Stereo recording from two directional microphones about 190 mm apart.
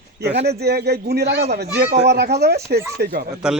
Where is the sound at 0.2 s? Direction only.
60° right (ahead or behind).